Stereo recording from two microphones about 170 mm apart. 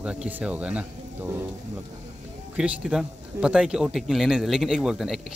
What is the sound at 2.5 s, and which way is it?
Speech, 5° right (ahead or behind).